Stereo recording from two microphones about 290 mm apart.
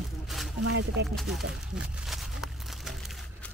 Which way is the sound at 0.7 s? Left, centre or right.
Right.